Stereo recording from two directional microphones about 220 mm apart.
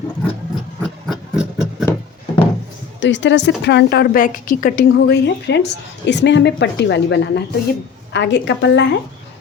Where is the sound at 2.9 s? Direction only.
55° left (ahead or behind).